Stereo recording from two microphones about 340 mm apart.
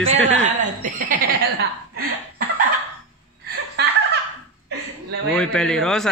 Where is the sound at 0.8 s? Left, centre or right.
Right.